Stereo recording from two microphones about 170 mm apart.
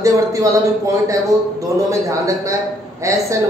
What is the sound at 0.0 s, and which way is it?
A woman's voice, 20° right (ahead or behind).